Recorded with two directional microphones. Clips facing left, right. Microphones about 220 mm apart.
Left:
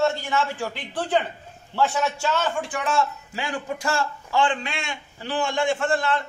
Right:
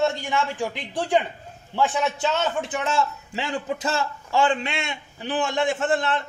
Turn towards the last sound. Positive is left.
turn(degrees=-20)  # may be behind; listen again after turning